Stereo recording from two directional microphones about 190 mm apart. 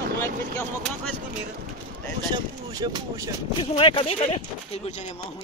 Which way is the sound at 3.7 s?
25° left (ahead or behind).